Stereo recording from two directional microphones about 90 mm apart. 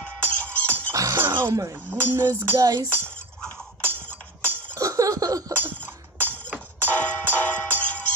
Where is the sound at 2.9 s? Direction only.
15° left (ahead or behind).